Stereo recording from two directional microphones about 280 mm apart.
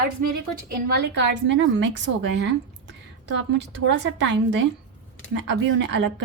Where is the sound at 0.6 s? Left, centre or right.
Right.